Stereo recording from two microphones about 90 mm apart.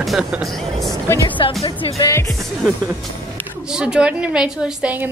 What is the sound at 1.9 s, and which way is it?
Speech, 35° left (ahead or behind).